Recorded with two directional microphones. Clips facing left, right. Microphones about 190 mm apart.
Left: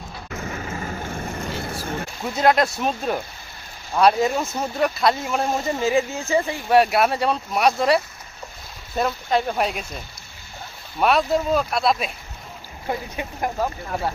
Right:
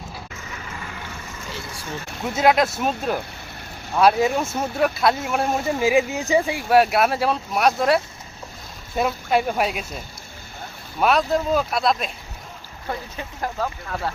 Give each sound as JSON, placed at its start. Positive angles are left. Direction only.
{"t": 0.3, "sound": "vehicle", "side_deg": 50}
{"t": 2.3, "sound": "speech", "side_deg": -5}
{"t": 6.7, "sound": "speech", "side_deg": 0}
{"t": 11.0, "sound": "speech", "side_deg": 0}
{"t": 12.9, "sound": "speech", "side_deg": 15}